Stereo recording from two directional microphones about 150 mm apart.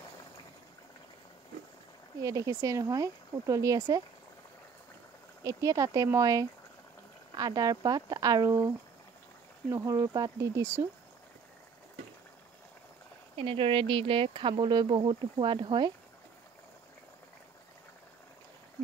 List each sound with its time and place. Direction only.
2.2 s speech: 20° right (ahead or behind)
5.4 s speech: 20° right (ahead or behind)
13.4 s speech: 35° right (ahead or behind)